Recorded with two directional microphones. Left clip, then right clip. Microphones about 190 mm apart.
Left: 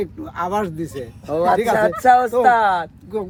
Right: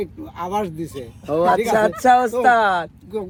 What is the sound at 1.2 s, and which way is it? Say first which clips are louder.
Speech: right 1 dB; 35° right (ahead or behind).